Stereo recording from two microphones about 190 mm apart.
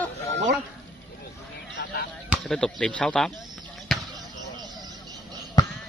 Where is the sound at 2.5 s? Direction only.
5° left (ahead or behind).